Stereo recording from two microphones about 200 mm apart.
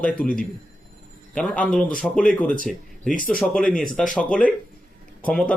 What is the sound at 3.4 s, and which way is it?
Speech, 5° left (ahead or behind).